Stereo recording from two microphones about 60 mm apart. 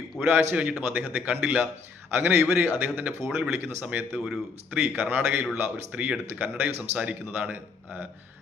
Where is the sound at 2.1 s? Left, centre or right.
Right.